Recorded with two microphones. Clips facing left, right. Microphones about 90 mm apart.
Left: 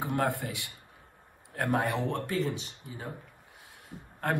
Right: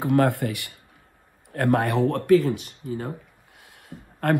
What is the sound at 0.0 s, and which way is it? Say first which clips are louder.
Speech: right 9 dB; 65° right (ahead or behind).